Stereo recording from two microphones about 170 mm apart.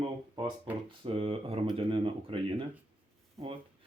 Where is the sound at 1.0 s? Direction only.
35° right (ahead or behind).